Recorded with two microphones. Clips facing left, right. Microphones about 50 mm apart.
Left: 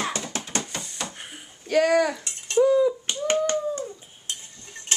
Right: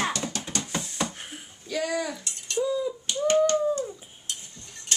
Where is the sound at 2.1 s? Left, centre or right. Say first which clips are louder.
Left 7 dB; left.